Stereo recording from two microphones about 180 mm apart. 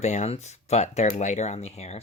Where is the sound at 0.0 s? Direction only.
40° left (ahead or behind).